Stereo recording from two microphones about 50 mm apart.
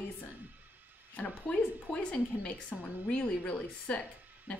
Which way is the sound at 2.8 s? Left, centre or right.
Left.